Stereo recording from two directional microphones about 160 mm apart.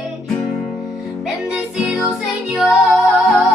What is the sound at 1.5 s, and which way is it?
Music, 5° right (ahead or behind).